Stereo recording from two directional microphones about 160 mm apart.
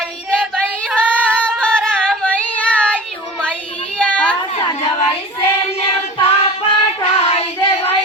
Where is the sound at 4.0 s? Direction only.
5° left (ahead or behind).